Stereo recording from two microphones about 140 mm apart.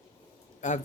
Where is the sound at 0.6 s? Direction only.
60° left (ahead or behind).